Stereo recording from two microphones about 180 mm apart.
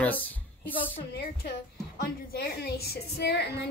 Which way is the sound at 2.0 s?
65° left (ahead or behind).